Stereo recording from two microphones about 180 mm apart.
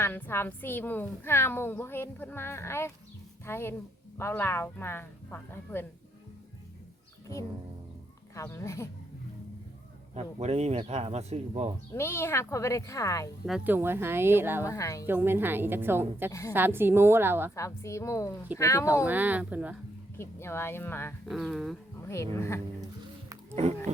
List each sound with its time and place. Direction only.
0.0 s a woman's voice: 10° left (ahead or behind)
8.4 s a woman's voice: 15° left (ahead or behind)
10.2 s speech: 35° right (ahead or behind)
11.9 s a woman's voice: 15° left (ahead or behind)
13.4 s speech: centre (ahead or behind)
13.7 s a woman's voice: 10° right (ahead or behind)
14.6 s a woman's voice: 15° left (ahead or behind)
15.0 s a woman's voice: 10° right (ahead or behind)
17.5 s a woman's voice: 15° left (ahead or behind)
19.0 s a woman's voice: 10° right (ahead or behind)
20.1 s a woman's voice: 15° left (ahead or behind)
21.2 s speech: centre (ahead or behind)
21.9 s a woman's voice: 15° left (ahead or behind)
23.6 s speech: 35° right (ahead or behind)